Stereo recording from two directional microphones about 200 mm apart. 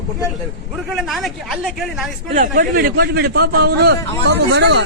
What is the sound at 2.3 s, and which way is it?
A man's voice, 40° right (ahead or behind).